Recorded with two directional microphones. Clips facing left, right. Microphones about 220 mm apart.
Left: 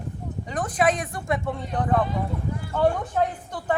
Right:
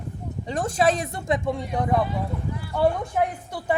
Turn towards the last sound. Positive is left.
turn(degrees=-10)  # may be behind; listen again after turning